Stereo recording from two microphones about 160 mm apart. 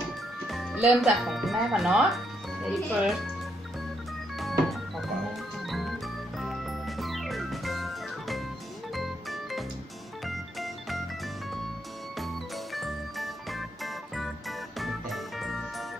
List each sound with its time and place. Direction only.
0.5 s speech: centre (ahead or behind)
4.4 s organ: centre (ahead or behind)
5.7 s music: centre (ahead or behind)
12.7 s music: centre (ahead or behind)